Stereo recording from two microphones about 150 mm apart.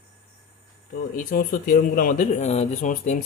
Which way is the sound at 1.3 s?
70° left (ahead or behind).